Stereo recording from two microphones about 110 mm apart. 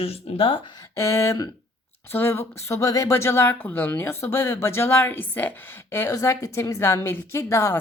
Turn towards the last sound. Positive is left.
turn(degrees=25)  # may be behind; listen again after turning